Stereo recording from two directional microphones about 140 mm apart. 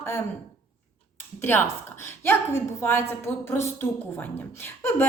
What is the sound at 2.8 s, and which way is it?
A woman's voice, 15° left (ahead or behind).